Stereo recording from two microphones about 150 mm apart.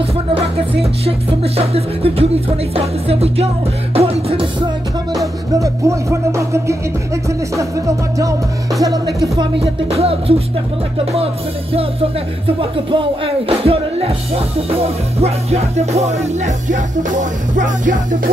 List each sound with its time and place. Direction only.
0.3 s music: 40° right (ahead or behind)
5.2 s music: 20° right (ahead or behind)
9.8 s music: 40° right (ahead or behind)
12.5 s music: 35° right (ahead or behind)
15.1 s music: 45° right (ahead or behind)